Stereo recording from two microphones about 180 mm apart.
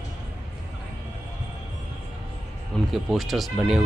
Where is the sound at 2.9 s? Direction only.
Centre (ahead or behind).